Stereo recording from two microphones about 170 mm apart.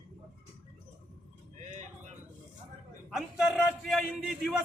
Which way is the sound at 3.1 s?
5° right (ahead or behind).